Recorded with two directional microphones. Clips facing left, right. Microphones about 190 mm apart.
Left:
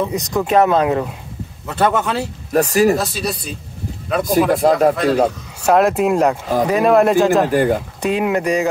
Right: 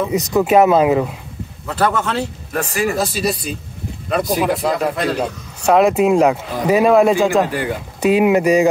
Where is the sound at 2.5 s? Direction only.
40° left (ahead or behind).